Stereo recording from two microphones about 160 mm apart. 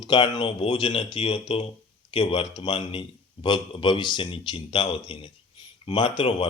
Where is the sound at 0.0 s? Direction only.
30° left (ahead or behind).